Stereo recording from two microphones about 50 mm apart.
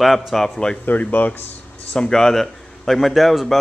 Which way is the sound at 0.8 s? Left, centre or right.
Left.